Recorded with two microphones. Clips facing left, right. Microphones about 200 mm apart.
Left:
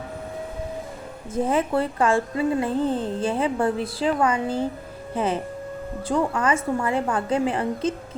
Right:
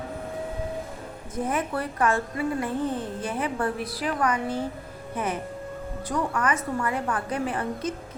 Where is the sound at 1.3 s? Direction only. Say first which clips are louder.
Left 6 dB; 25° left (ahead or behind).